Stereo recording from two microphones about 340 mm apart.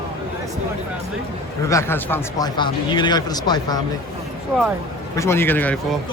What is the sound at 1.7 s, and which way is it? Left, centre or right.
Speech, centre.